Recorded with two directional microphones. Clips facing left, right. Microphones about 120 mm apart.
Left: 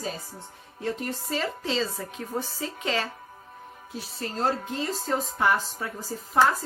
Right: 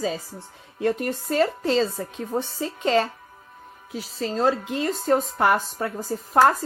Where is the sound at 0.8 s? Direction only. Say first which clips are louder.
Right 7 dB; 60° right (ahead or behind).